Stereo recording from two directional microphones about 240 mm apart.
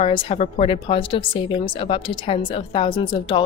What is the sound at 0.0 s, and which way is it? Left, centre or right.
Speech, left.